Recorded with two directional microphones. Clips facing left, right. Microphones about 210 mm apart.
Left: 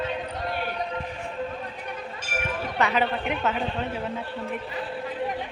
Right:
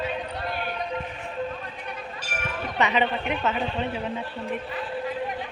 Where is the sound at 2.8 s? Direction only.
Centre (ahead or behind).